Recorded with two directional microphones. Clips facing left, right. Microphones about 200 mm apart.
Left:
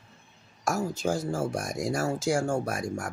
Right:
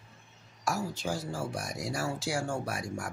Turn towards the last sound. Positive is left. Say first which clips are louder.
# left 4 dB
turn(degrees=45)  # may be behind; listen again after turning